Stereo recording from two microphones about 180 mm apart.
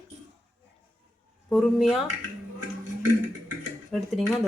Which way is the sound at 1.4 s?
Centre (ahead or behind).